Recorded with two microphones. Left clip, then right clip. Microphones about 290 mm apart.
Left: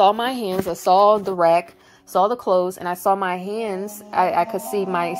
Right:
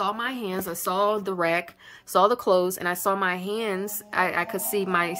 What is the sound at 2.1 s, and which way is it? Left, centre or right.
A woman's voice, right.